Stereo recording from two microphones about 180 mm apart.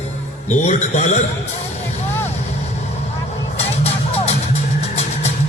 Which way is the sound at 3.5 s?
35° left (ahead or behind).